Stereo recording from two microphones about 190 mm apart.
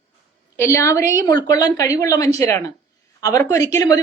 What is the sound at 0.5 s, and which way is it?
A woman's voice, 15° left (ahead or behind).